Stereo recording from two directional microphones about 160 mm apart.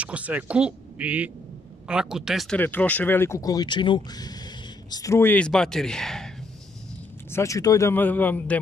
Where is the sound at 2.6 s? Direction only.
10° left (ahead or behind).